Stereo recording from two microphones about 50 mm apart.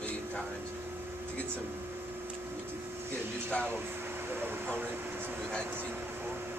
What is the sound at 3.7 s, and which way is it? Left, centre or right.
Air conditioning, right.